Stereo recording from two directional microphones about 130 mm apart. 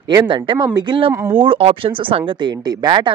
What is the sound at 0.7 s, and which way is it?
Speech, 40° right (ahead or behind).